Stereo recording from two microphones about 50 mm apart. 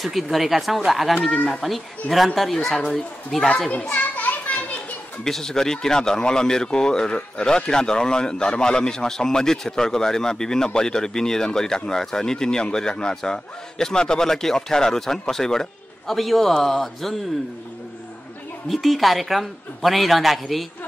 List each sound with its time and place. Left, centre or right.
0.0 s a man's voice: centre
3.9 s children playing: left
5.2 s a man's voice: centre
18.7 s a man's voice: centre